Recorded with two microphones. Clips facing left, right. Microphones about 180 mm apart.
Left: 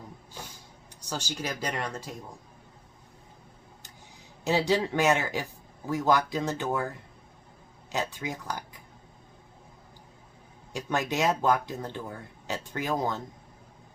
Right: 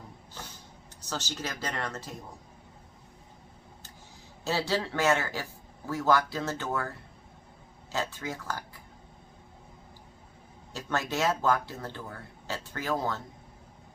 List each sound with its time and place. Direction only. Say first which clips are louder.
1.0 s speech: left 2 dB; 10° left (ahead or behind)
4.4 s speech: left 4 dB; 15° left (ahead or behind)
7.9 s speech: left 1 dB; 15° left (ahead or behind)
10.7 s speech: left 2 dB; 15° left (ahead or behind)